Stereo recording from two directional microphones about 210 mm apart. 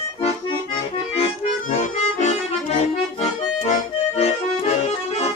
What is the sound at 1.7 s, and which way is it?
Accordion, 35° left (ahead or behind).